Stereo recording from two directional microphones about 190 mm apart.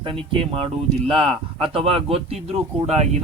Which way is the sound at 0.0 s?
30° right (ahead or behind).